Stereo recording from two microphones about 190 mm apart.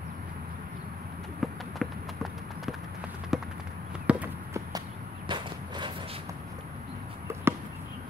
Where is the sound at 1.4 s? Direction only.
Centre (ahead or behind).